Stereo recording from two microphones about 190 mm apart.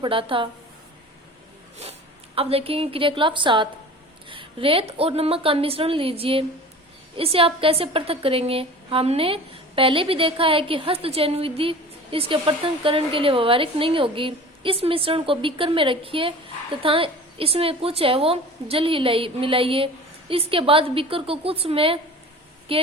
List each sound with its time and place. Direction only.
0.0 s a woman's voice: 25° right (ahead or behind)
1.8 s a woman's voice: 30° right (ahead or behind)